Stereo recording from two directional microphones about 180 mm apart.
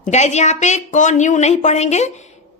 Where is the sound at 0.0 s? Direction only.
40° left (ahead or behind).